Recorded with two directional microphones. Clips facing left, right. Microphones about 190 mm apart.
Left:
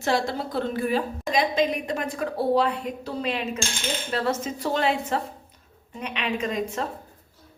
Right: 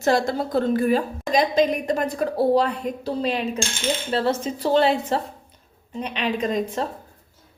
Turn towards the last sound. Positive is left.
turn(degrees=-35)  # may be behind; listen again after turning